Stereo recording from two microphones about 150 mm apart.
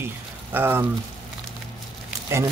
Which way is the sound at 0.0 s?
15° right (ahead or behind).